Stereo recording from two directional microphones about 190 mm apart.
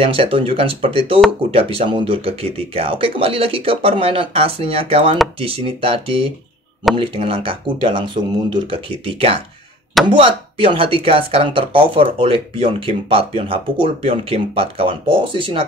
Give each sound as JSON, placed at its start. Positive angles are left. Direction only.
{"t": 0.0, "sound": "speech", "side_deg": -30}